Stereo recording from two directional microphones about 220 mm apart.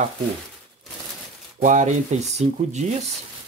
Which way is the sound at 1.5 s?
35° right (ahead or behind).